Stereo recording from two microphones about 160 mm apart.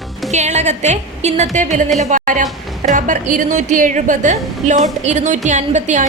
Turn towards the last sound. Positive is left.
turn(degrees=-50)  # may be behind; listen again after turning